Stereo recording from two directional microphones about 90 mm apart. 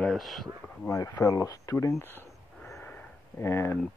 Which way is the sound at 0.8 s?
40° left (ahead or behind).